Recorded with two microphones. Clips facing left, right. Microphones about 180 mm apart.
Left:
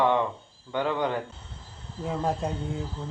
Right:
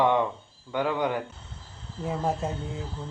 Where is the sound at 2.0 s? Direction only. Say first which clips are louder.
Even; centre (ahead or behind).